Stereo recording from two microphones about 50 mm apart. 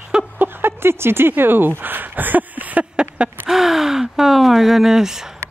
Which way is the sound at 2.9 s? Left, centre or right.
Right.